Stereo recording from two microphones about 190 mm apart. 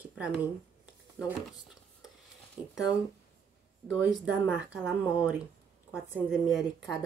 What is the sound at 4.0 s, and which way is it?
Speech, 5° right (ahead or behind).